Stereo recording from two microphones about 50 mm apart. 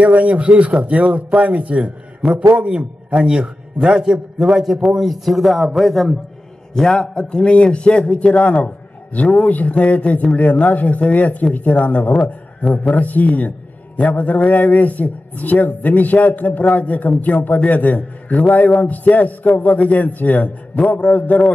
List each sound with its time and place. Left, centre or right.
0.0 s a man's voice: right; by 21.4 s left